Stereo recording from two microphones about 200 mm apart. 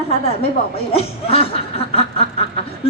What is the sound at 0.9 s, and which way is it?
Speech, 30° left (ahead or behind).